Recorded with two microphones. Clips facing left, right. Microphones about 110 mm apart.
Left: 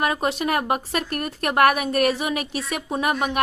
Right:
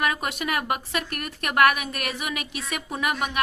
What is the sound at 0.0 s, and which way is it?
A woman's voice, 35° left (ahead or behind).